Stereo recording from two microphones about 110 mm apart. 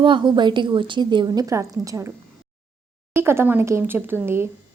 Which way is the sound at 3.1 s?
20° right (ahead or behind).